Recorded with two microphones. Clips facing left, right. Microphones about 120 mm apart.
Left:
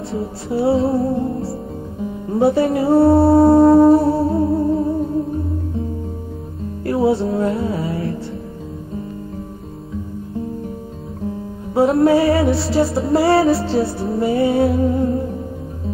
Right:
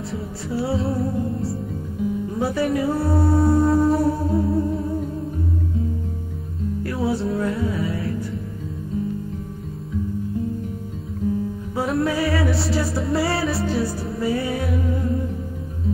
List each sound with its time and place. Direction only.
0.1 s music: 25° left (ahead or behind)
3.3 s music: 60° left (ahead or behind)
3.6 s music: 30° left (ahead or behind)
6.8 s music: 25° left (ahead or behind)
11.7 s music: 30° left (ahead or behind)